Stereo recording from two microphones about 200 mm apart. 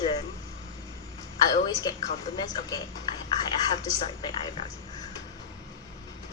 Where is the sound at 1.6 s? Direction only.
20° left (ahead or behind).